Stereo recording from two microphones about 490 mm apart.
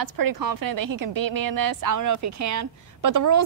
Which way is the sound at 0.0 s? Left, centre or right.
Right.